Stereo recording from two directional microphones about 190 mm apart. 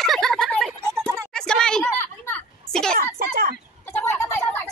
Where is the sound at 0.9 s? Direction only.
10° right (ahead or behind).